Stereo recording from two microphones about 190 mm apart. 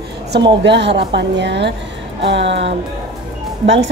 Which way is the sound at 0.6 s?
65° right (ahead or behind).